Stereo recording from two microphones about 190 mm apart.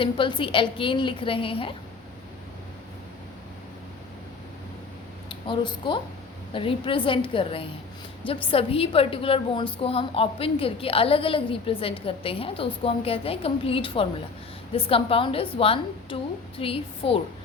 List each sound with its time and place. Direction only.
0.0 s a woman's voice: 25° left (ahead or behind)
5.3 s a woman's voice: 25° left (ahead or behind)